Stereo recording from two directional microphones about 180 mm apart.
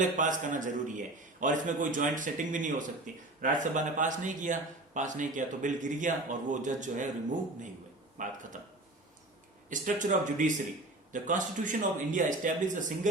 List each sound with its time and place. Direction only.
0.2 s speech: 45° right (ahead or behind)
8.2 s speech: 45° right (ahead or behind)